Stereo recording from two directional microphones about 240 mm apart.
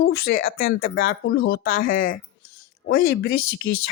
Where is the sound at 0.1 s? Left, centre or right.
Left.